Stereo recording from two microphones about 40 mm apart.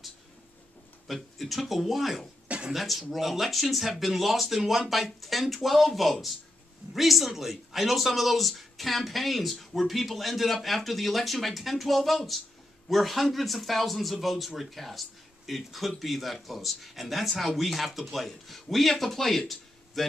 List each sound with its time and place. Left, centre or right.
1.0 s speech: centre
2.4 s a sound: right
2.7 s speech: centre